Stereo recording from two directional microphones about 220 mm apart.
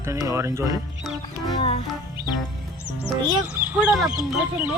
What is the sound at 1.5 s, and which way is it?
Speech, 20° left (ahead or behind).